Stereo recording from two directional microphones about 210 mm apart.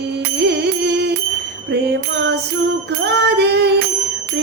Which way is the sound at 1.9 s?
50° right (ahead or behind).